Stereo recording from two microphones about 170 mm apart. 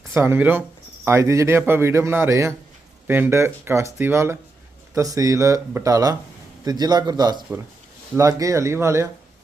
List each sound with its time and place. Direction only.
0.1 s a man's voice: 15° right (ahead or behind)